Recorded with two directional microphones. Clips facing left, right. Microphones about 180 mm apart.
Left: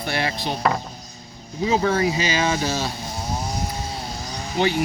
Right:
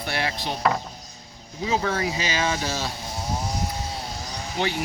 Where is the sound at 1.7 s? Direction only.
20° left (ahead or behind).